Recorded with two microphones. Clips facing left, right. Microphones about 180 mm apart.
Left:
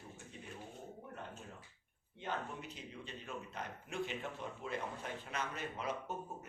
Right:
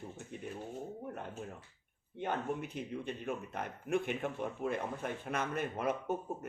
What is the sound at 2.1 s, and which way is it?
Speech, 55° right (ahead or behind).